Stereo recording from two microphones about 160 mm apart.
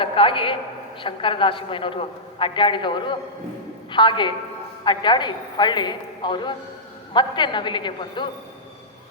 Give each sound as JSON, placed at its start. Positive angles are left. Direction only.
{"t": 0.0, "sound": "a man's voice", "side_deg": 35}